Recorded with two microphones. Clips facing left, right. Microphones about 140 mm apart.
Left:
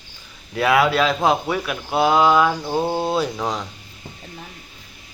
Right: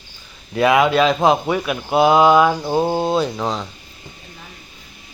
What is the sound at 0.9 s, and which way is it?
Speech, 20° right (ahead or behind).